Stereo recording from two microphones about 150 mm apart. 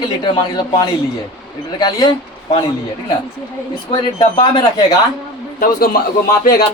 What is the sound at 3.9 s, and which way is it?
Speech, 30° left (ahead or behind).